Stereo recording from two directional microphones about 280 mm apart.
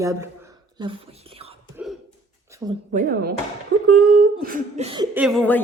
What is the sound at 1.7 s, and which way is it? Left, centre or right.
Throat clearing, centre.